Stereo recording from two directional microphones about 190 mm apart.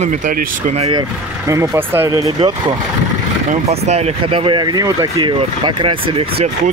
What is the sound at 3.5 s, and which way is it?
Speech, 35° right (ahead or behind).